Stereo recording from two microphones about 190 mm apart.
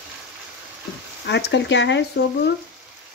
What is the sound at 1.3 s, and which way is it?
Speech, 65° left (ahead or behind).